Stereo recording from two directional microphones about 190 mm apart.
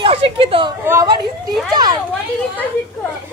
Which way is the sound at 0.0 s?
30° right (ahead or behind).